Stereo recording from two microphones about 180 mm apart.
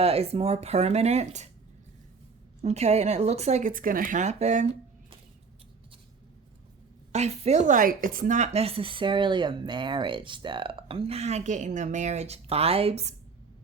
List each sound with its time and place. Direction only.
0.0 s speech: 35° right (ahead or behind)
2.6 s speech: 35° right (ahead or behind)
7.1 s speech: 35° right (ahead or behind)